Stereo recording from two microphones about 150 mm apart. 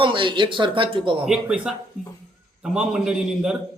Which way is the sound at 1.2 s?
5° right (ahead or behind).